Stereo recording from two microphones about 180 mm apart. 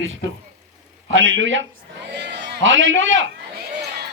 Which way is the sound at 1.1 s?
90° right.